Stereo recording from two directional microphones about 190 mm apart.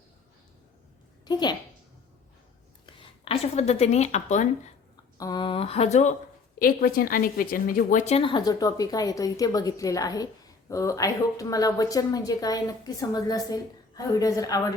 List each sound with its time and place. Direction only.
1.2 s a woman's voice: 20° left (ahead or behind)
2.8 s speech: 30° left (ahead or behind)
5.1 s speech: 20° left (ahead or behind); by 6.1 s 35° left (ahead or behind)
6.6 s speech: 50° left (ahead or behind); by 14.7 s 20° left (ahead or behind)